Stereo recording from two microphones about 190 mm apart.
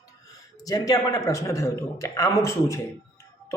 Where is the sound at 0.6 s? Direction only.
20° left (ahead or behind).